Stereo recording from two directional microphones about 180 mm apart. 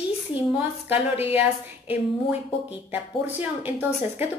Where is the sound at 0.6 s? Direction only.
10° right (ahead or behind).